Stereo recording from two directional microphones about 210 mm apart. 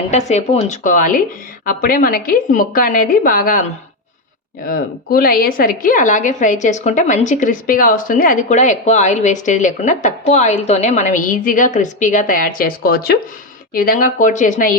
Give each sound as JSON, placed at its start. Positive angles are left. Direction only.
{"t": 0.1, "sound": "a woman's voice", "side_deg": 30}